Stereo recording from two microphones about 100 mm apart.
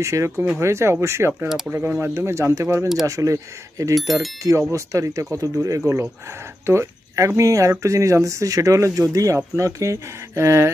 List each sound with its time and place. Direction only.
0.0 s speech: 30° right (ahead or behind)
2.1 s speech: 25° right (ahead or behind)
3.9 s speech: centre (ahead or behind)
4.4 s speech: 30° right (ahead or behind)